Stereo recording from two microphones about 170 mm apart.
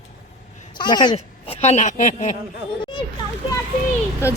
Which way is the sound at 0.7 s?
25° left (ahead or behind).